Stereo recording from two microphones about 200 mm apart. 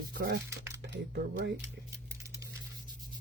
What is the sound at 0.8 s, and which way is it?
Speech, 60° right (ahead or behind).